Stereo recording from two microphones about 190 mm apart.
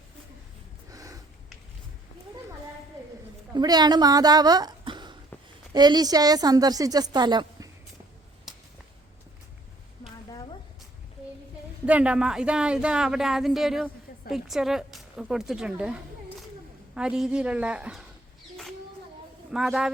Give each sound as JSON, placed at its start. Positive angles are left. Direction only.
{"t": 0.9, "sound": "a sound", "side_deg": -20}
{"t": 3.5, "sound": "a woman's voice", "side_deg": -20}
{"t": 8.5, "sound": "whip", "side_deg": 0}
{"t": 11.9, "sound": "speech", "side_deg": -5}
{"t": 19.5, "sound": "speech", "side_deg": 0}